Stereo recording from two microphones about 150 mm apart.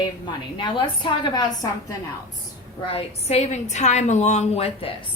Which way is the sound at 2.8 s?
40° left (ahead or behind).